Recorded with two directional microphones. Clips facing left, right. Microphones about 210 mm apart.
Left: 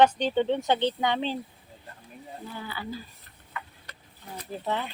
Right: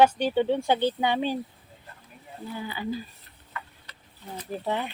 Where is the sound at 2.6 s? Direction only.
15° right (ahead or behind).